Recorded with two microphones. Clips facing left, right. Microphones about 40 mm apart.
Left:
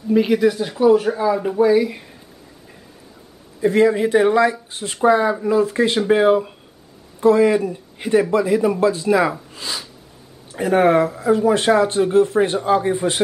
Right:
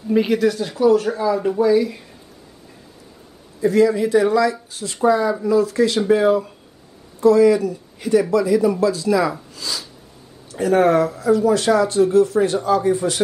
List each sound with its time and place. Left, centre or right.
0.1 s speech: centre; by 2.0 s left
3.6 s speech: left